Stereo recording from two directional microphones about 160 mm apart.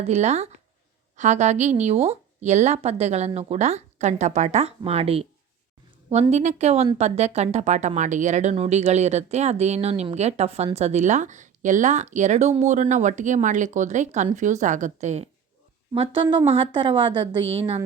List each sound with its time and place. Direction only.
0.0 s speech: 45° right (ahead or behind)
6.3 s speech: 45° right (ahead or behind)
16.0 s a woman's voice: 30° right (ahead or behind)